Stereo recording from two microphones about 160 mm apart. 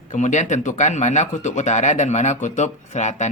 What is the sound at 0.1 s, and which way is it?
Speech, 50° left (ahead or behind).